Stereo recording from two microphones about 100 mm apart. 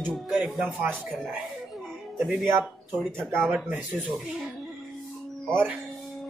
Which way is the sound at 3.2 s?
25° right (ahead or behind).